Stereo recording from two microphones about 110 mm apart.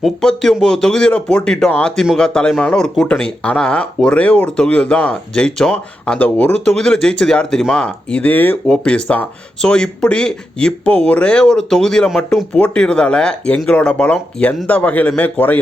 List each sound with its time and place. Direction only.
0.0 s speech: 5° left (ahead or behind)